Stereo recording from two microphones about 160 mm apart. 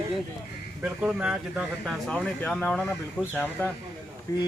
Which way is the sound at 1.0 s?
5° right (ahead or behind).